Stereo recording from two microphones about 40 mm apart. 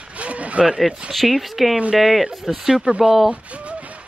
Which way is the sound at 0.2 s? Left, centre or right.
Right.